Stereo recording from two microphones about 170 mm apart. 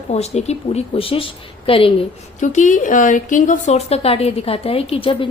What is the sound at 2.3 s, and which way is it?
A woman's voice, 45° left (ahead or behind).